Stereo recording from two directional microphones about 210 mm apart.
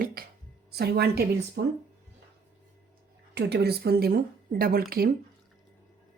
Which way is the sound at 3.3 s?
50° right (ahead or behind).